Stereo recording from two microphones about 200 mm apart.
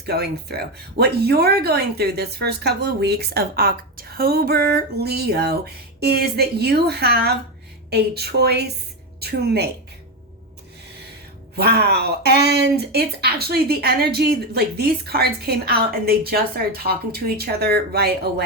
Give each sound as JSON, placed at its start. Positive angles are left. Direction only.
{"t": 0.0, "sound": "speech", "side_deg": -55}
{"t": 11.5, "sound": "speech", "side_deg": -55}